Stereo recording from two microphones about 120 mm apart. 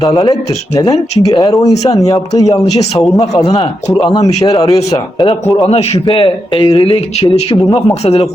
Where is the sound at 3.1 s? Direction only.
35° left (ahead or behind).